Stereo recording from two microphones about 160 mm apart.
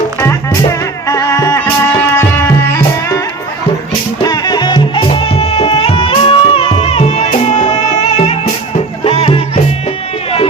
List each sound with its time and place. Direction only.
1.0 s music: 20° left (ahead or behind)
4.2 s music: 25° left (ahead or behind)